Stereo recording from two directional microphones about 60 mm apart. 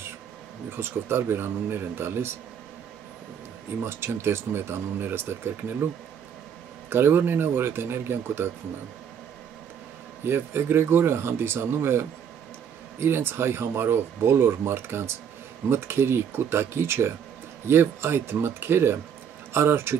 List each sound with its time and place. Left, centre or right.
0.7 s speech: right
3.8 s speech: right
6.9 s speech: right
10.2 s speech: right